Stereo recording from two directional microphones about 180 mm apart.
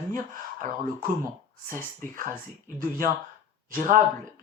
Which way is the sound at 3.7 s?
45° right (ahead or behind).